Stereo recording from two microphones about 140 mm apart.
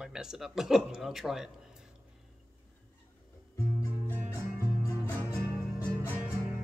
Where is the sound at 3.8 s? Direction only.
20° left (ahead or behind).